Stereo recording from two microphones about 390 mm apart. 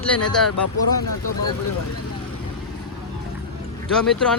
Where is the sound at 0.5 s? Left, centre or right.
Left.